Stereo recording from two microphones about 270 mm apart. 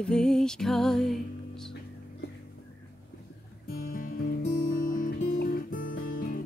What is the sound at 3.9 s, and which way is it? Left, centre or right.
Music, left.